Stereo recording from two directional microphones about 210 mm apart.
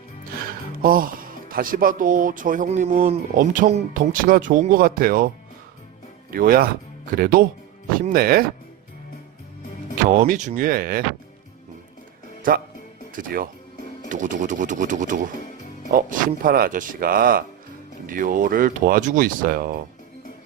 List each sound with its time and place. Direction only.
0.8 s speech: 40° right (ahead or behind)
6.3 s speech: 45° right (ahead or behind)
10.1 s speech: 35° right (ahead or behind)
12.4 s speech: 45° right (ahead or behind)